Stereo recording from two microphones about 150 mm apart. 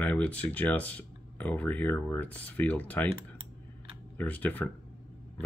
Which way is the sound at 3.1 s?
35° right (ahead or behind).